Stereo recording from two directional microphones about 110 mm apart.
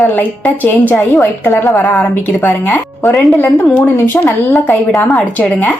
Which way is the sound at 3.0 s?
Centre (ahead or behind).